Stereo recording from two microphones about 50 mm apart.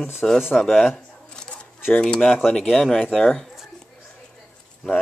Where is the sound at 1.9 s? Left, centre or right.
Centre.